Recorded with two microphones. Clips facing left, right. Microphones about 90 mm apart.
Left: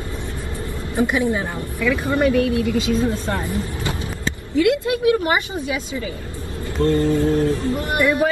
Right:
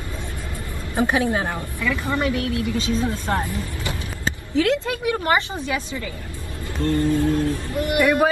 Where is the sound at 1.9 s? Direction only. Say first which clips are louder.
Left 6 dB; 20° left (ahead or behind).